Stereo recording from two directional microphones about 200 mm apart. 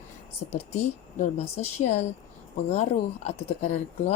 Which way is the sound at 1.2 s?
35° left (ahead or behind).